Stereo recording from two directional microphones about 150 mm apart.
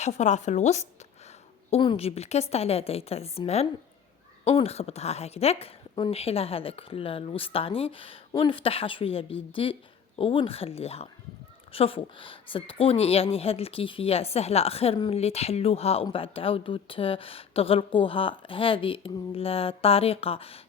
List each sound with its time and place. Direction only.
0.0 s a woman's voice: 50° left (ahead or behind)
1.7 s a woman's voice: 35° left (ahead or behind)